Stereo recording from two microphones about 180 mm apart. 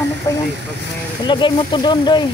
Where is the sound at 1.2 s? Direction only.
25° left (ahead or behind).